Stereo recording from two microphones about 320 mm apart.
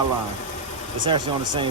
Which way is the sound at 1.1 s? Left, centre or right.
Centre.